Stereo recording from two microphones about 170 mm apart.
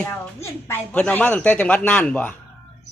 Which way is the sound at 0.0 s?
15° left (ahead or behind).